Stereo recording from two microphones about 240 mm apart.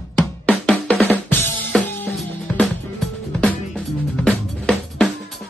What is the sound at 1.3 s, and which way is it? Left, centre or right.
Music, centre.